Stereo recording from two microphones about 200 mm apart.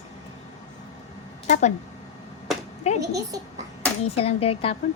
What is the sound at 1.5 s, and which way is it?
Speech, 35° left (ahead or behind).